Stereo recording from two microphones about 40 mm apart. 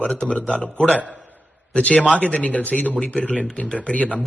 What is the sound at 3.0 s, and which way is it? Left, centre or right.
Speech, left.